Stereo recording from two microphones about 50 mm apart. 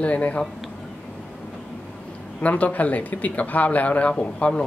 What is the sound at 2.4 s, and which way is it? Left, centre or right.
Speech, left.